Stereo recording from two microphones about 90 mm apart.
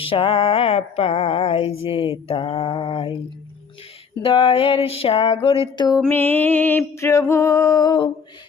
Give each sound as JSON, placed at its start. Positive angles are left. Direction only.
{"t": 0.0, "sound": "mantra", "side_deg": 90}
{"t": 4.2, "sound": "a sound", "side_deg": 75}
{"t": 6.1, "sound": "music", "side_deg": 20}